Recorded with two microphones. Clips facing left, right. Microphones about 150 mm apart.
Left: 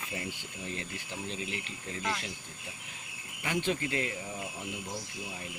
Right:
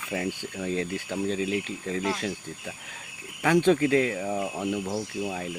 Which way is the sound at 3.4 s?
90° right.